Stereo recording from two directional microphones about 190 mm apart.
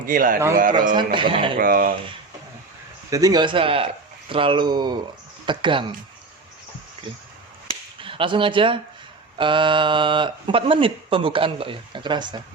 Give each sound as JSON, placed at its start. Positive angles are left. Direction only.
{"t": 0.0, "sound": "a man's voice", "side_deg": -45}
{"t": 0.9, "sound": "speech", "side_deg": -25}
{"t": 1.5, "sound": "a man's voice", "side_deg": -50}
{"t": 3.1, "sound": "speech", "side_deg": -20}
{"t": 7.9, "sound": "speech", "side_deg": -25}